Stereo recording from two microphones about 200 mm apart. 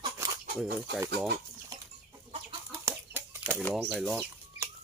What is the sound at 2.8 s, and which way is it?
Chicken, 10° right (ahead or behind).